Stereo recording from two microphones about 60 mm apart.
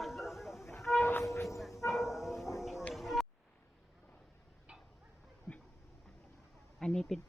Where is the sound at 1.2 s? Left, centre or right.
Left.